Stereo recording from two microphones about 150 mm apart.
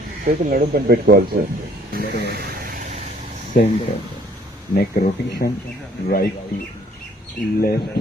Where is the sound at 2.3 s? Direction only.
75° right (ahead or behind).